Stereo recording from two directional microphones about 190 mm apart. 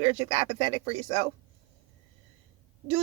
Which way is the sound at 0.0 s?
30° right (ahead or behind).